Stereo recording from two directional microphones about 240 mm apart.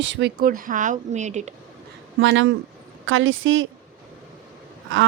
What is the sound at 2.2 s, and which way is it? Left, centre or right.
Speech, right.